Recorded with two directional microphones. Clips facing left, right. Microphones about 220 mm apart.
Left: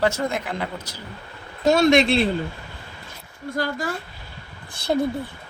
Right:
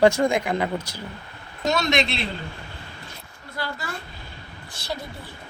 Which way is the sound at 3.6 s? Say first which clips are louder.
Left 6 dB; 45° left (ahead or behind).